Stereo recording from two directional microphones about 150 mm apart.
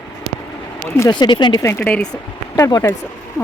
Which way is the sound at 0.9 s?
25° left (ahead or behind).